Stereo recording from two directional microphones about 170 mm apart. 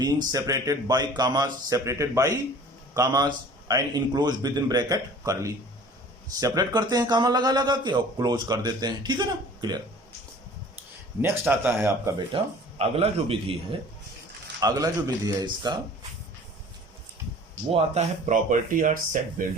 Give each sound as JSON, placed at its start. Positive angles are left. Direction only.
{"t": 0.0, "sound": "a man's voice", "side_deg": -20}
{"t": 11.2, "sound": "speech", "side_deg": -10}
{"t": 12.3, "sound": "a man's voice", "side_deg": -30}
{"t": 14.6, "sound": "a man's voice", "side_deg": -20}
{"t": 17.7, "sound": "speech", "side_deg": -40}